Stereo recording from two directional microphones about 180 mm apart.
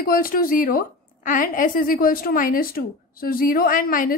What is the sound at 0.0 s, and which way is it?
A woman's voice, 50° left (ahead or behind).